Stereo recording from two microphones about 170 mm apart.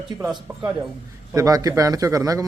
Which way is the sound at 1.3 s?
20° right (ahead or behind).